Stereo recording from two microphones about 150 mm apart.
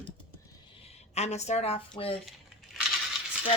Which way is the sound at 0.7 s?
45° left (ahead or behind).